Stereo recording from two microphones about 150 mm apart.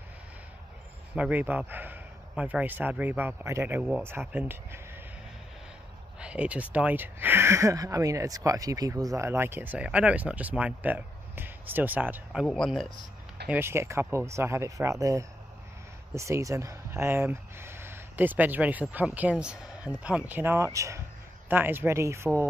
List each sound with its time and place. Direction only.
1.1 s speech: 10° right (ahead or behind)
6.1 s speech: 10° right (ahead or behind)
12.4 s speech: 5° left (ahead or behind)
13.5 s speech: 15° right (ahead or behind)